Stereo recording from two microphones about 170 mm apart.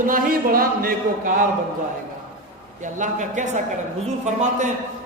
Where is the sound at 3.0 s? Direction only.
45° right (ahead or behind).